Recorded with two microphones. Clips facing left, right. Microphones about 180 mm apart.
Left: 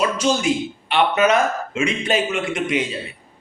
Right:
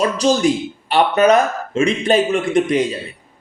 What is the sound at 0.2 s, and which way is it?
Speech, 35° right (ahead or behind).